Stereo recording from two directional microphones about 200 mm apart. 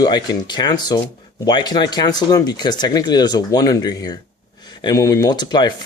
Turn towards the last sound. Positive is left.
turn(degrees=20)  # may be behind; listen again after turning